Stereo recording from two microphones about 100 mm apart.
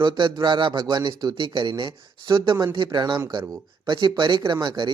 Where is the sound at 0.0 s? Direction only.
50° right (ahead or behind).